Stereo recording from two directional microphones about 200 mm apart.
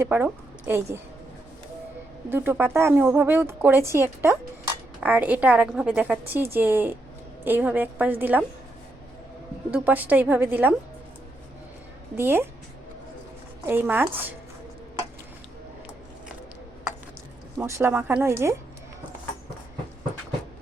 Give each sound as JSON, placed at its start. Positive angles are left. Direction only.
{"t": 0.0, "sound": "a woman's voice", "side_deg": -10}
{"t": 2.3, "sound": "a woman's voice", "side_deg": -10}
{"t": 9.7, "sound": "a woman's voice", "side_deg": -10}
{"t": 12.1, "sound": "a woman's voice", "side_deg": -10}
{"t": 13.7, "sound": "a woman's voice", "side_deg": -10}
{"t": 17.6, "sound": "a woman's voice", "side_deg": -15}